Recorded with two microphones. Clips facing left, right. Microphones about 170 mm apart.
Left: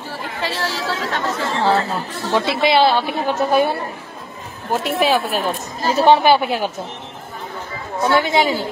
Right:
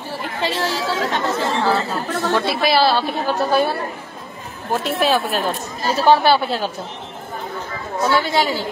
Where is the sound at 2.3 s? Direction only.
20° left (ahead or behind).